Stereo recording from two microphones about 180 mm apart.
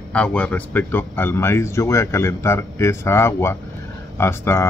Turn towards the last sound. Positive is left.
turn(degrees=15)  # may be behind; listen again after turning